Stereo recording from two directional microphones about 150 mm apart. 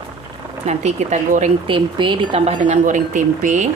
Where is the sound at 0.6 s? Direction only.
50° right (ahead or behind).